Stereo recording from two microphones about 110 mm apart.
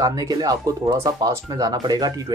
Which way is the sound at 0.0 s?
35° right (ahead or behind).